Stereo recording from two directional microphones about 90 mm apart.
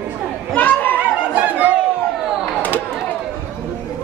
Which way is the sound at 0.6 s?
20° left (ahead or behind).